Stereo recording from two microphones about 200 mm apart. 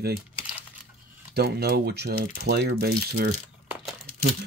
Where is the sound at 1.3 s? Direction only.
55° right (ahead or behind).